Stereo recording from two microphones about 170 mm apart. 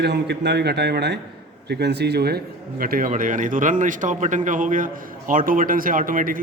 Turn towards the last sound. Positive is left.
turn(degrees=-55)  # may be behind; listen again after turning